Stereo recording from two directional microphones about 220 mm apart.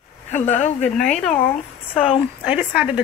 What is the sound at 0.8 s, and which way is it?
Speech, centre (ahead or behind).